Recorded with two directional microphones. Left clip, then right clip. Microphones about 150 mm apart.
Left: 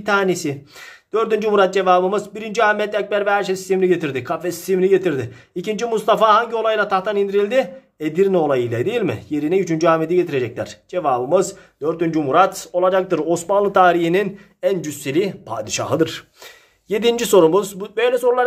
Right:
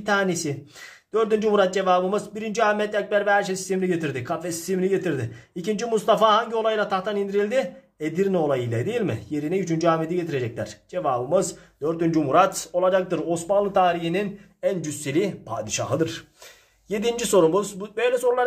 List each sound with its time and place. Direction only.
0.0 s a man's voice: 30° left (ahead or behind)
13.1 s speech: 45° left (ahead or behind)
14.6 s a man's voice: 35° left (ahead or behind)